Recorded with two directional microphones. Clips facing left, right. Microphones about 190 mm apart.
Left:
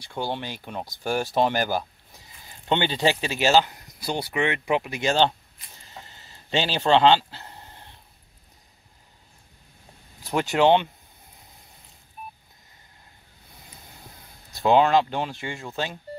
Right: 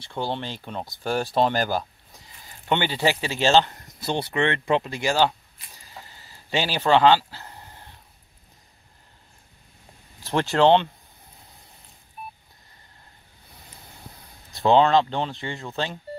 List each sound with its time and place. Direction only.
0.0 s speech: 10° left (ahead or behind)
5.9 s a sound: 20° left (ahead or behind)
10.4 s speech: 15° left (ahead or behind)
14.6 s speech: 10° left (ahead or behind)